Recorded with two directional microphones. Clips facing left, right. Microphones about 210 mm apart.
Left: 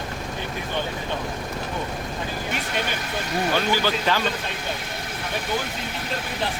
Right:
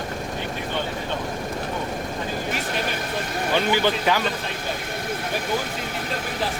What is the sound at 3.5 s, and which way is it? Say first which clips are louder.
Speech: right 4 dB; 20° right (ahead or behind).